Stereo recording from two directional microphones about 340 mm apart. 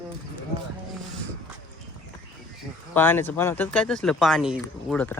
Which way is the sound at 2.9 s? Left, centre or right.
Centre.